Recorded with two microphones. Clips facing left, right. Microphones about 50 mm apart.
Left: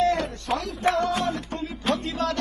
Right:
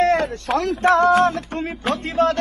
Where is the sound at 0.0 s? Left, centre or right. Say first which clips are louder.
Right 5 dB; right.